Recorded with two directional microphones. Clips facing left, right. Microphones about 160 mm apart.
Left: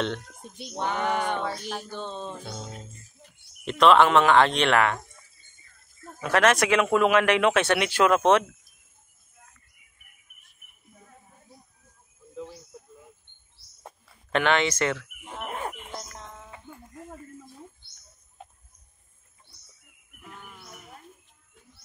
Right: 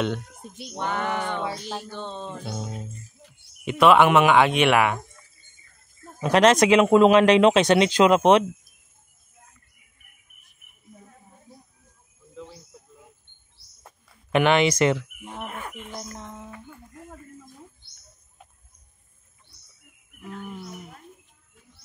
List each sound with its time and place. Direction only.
0.0 s speech: 5° right (ahead or behind)
0.7 s a sound: 15° left (ahead or behind)
2.4 s speech: 5° right (ahead or behind)
6.2 s speech: 20° right (ahead or behind)
14.3 s speech: 15° right (ahead or behind)
15.5 s music: 30° left (ahead or behind)
16.4 s a sound: 25° left (ahead or behind)